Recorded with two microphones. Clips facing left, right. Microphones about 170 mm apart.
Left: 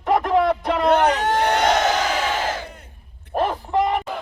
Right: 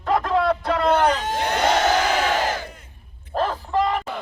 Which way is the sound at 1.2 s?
70° left (ahead or behind).